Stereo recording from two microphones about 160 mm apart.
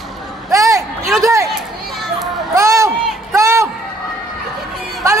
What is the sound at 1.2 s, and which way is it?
Speech, 20° right (ahead or behind).